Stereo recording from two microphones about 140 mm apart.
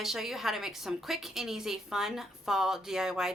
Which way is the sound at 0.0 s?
Centre (ahead or behind).